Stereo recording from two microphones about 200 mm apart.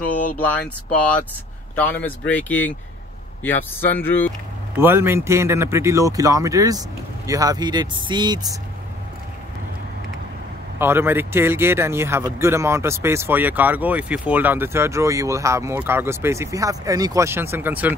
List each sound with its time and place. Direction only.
1.8 s speech: 10° left (ahead or behind)
4.7 s speech: 10° right (ahead or behind)
10.8 s speech: 10° right (ahead or behind)